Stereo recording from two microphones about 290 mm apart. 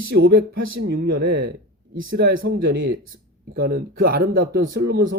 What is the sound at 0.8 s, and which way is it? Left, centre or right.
Speech, right.